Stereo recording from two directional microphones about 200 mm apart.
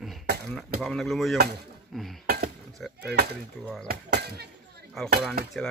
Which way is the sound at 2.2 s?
50° right (ahead or behind).